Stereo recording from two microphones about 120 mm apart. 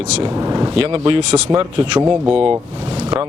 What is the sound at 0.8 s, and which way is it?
Speech, 60° right (ahead or behind).